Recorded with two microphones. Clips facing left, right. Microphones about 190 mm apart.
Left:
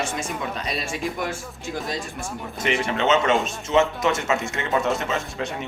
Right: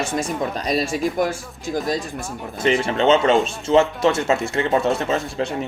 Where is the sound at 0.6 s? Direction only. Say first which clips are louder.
Right 7 dB; 40° right (ahead or behind).